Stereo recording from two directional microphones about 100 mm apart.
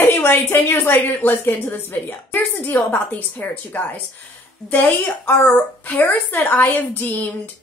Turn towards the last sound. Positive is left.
turn(degrees=20)  # may be behind; listen again after turning